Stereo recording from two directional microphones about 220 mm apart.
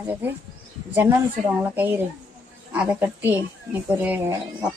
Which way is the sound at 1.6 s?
10° right (ahead or behind).